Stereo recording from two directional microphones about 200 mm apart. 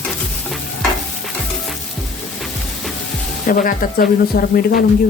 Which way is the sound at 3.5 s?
45° left (ahead or behind).